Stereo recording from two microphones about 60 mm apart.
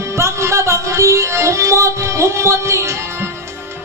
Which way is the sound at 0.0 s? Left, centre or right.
Right.